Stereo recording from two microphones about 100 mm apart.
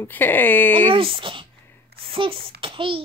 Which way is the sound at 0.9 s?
60° right (ahead or behind).